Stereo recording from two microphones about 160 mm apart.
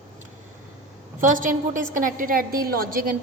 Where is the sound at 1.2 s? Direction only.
55° right (ahead or behind).